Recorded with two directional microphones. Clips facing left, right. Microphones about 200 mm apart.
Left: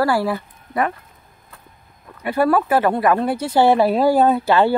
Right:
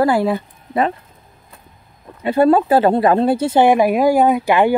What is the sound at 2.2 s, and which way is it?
Speech, 25° right (ahead or behind).